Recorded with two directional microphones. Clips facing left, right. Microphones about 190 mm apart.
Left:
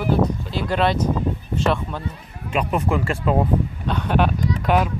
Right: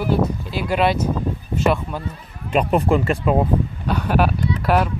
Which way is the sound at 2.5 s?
35° right (ahead or behind).